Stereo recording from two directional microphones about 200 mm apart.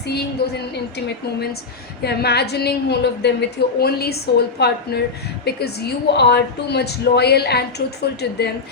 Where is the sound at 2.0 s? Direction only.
55° left (ahead or behind).